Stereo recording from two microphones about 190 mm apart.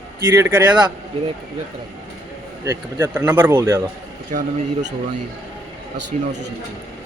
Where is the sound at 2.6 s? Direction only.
15° right (ahead or behind).